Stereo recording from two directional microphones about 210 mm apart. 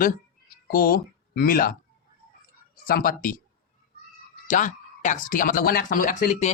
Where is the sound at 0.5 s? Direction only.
45° left (ahead or behind).